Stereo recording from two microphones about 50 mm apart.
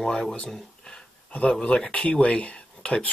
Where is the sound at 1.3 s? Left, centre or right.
Left.